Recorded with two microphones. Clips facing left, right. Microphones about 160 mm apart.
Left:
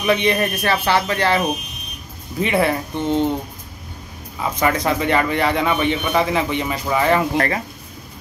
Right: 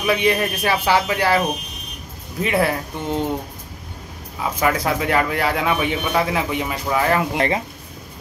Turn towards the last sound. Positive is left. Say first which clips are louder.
# even
turn(degrees=-20)  # may be behind; listen again after turning